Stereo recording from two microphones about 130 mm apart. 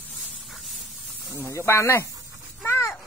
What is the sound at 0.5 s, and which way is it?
Spray, centre (ahead or behind).